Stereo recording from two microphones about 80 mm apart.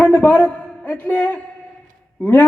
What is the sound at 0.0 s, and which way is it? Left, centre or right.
A man's voice, left.